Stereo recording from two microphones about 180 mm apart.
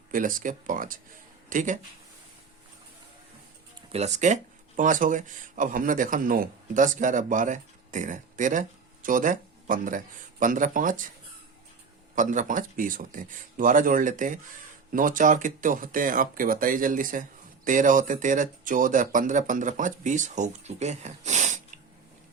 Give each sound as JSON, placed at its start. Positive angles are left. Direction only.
{"t": 0.1, "sound": "speech", "side_deg": -50}
{"t": 3.9, "sound": "speech", "side_deg": -40}
{"t": 12.1, "sound": "speech", "side_deg": -45}